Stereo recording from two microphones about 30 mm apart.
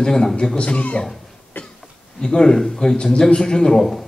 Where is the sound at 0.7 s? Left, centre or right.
Left.